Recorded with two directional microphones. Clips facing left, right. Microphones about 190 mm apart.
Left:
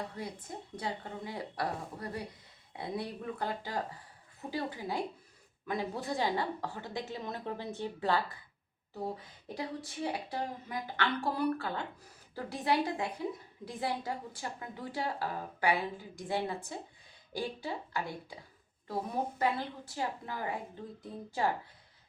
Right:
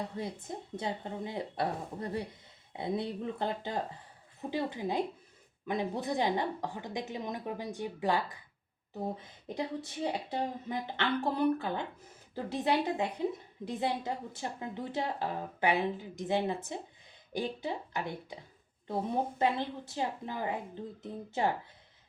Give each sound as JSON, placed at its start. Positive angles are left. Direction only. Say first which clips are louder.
{"t": 0.2, "sound": "a woman's voice", "louder": "right 3 dB", "side_deg": -25}
{"t": 9.6, "sound": "speech", "louder": "right 3 dB", "side_deg": -20}